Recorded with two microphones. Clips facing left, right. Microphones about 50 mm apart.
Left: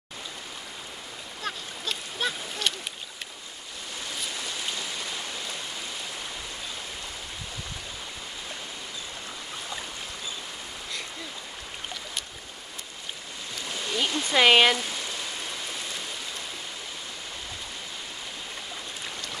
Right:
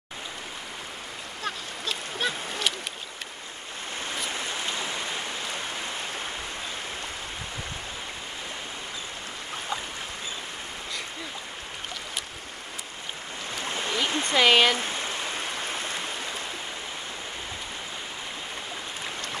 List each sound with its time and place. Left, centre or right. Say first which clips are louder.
1.4 s duck: right 1 dB; centre
4.1 s rain: right 3 dB; right
13.6 s stream: right 1 dB; right
14.3 s speech: left 1 dB; centre
14.8 s rain: right 3 dB; right